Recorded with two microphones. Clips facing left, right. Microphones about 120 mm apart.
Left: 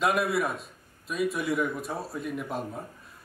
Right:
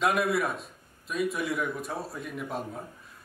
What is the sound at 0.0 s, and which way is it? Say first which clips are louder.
A man's voice: even; centre (ahead or behind).